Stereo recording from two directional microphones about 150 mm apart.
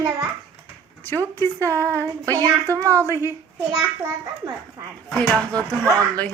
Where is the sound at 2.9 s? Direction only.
20° left (ahead or behind).